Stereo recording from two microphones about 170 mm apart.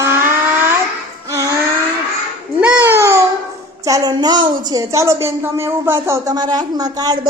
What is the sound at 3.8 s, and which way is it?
A woman's voice, 20° right (ahead or behind).